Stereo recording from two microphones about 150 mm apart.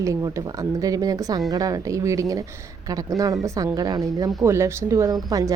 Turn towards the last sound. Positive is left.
turn(degrees=-25)  # may be behind; listen again after turning